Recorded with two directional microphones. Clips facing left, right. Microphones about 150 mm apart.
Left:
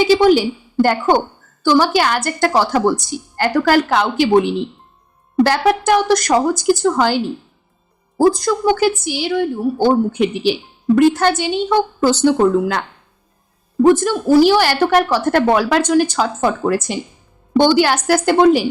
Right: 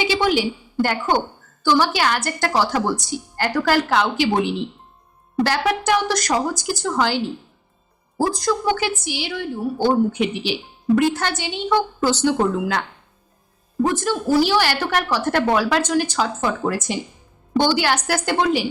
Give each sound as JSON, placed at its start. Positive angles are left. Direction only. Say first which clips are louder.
{"t": 0.0, "sound": "a woman's voice", "louder": "left 8 dB", "side_deg": 45}
{"t": 8.3, "sound": "a woman's voice", "louder": "left 5 dB", "side_deg": 50}
{"t": 13.8, "sound": "a woman's voice", "louder": "left 8 dB", "side_deg": 55}